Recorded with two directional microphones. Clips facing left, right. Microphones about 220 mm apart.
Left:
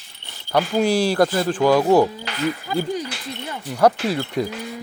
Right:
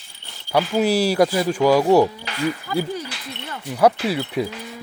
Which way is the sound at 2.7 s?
20° left (ahead or behind).